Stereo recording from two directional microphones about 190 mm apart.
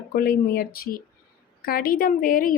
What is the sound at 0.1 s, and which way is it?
A woman's voice, 50° left (ahead or behind).